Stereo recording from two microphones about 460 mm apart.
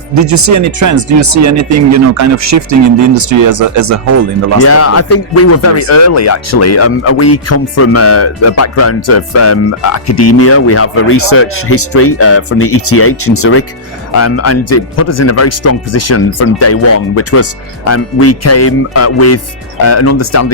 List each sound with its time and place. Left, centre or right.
0.1 s speech: right
4.6 s speech: left